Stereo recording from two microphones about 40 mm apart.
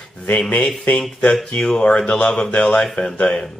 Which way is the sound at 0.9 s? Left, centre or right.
Left.